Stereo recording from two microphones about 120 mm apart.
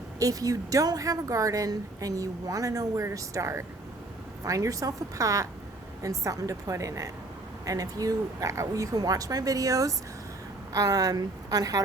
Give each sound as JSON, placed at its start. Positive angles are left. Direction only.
{"t": 0.2, "sound": "a woman's voice", "side_deg": -30}